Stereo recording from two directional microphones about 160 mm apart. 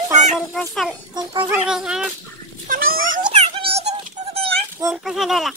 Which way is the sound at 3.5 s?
35° right (ahead or behind).